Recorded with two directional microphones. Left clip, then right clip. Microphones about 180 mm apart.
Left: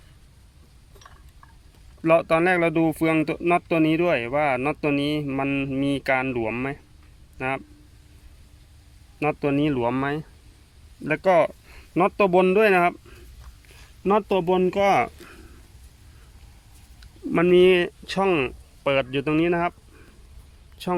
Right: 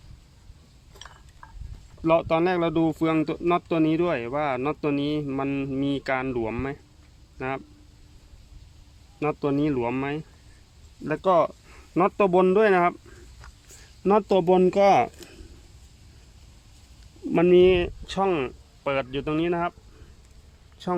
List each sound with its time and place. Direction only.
2.0 s speech: 15° left (ahead or behind)
9.1 s a man's voice: 10° left (ahead or behind)
14.0 s speech: 20° right (ahead or behind)
17.3 s speech: centre (ahead or behind)
17.7 s speech: 20° left (ahead or behind)
20.8 s speech: 20° left (ahead or behind)